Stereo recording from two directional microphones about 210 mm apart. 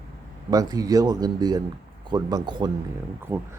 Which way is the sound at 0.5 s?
15° right (ahead or behind).